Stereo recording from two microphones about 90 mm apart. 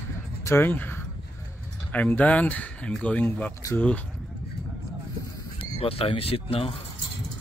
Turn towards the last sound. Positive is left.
turn(degrees=90)